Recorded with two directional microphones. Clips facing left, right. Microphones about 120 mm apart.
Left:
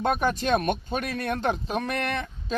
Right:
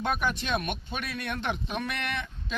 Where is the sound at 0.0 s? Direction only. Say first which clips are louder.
Left 5 dB; 40° left (ahead or behind).